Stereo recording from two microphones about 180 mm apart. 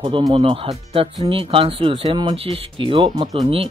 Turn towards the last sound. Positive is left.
turn(degrees=-30)  # may be behind; listen again after turning